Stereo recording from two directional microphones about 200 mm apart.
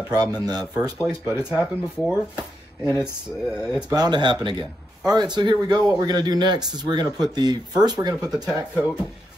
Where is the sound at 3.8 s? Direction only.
20° right (ahead or behind).